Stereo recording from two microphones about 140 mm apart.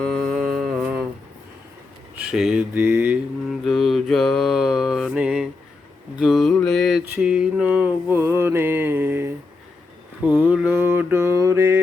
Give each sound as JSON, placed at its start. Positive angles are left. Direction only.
{"t": 0.0, "sound": "mantra", "side_deg": 5}
{"t": 2.1, "sound": "speech", "side_deg": -5}
{"t": 3.5, "sound": "mantra", "side_deg": 0}